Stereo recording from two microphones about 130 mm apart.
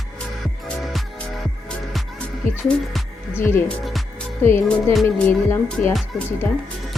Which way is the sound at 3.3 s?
20° left (ahead or behind).